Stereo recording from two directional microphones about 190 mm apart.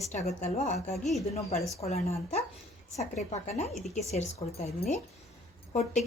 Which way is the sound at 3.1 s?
35° left (ahead or behind).